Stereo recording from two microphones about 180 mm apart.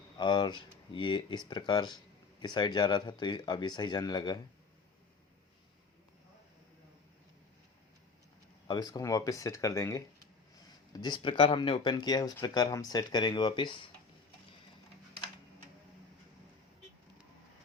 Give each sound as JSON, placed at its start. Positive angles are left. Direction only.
{"t": 0.2, "sound": "speech", "side_deg": 25}
{"t": 8.6, "sound": "speech", "side_deg": 20}